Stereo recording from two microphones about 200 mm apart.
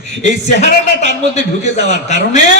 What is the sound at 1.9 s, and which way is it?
Speech, 35° left (ahead or behind).